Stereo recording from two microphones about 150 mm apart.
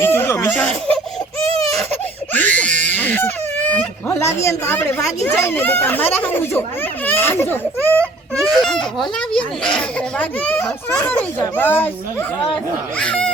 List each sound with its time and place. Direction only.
0.0 s speech: 15° left (ahead or behind)
1.9 s a sound: 10° left (ahead or behind)
5.2 s a child's voice: 15° left (ahead or behind)
8.4 s baby cry: centre (ahead or behind)
9.6 s a child's voice: 10° left (ahead or behind)
13.0 s speech: 5° left (ahead or behind)